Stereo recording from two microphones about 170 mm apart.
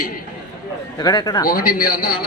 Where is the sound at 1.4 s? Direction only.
55° left (ahead or behind).